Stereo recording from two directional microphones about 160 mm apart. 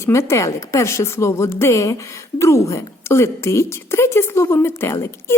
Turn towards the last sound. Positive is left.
turn(degrees=15)  # may be behind; listen again after turning